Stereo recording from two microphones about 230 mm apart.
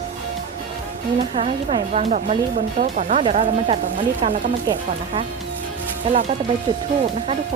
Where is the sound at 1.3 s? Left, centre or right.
Right.